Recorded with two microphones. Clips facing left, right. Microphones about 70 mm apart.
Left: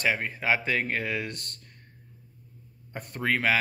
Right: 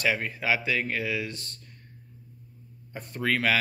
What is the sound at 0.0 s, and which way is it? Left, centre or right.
Speech, left.